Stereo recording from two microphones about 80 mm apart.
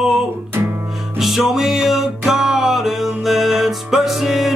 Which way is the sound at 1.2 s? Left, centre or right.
Centre.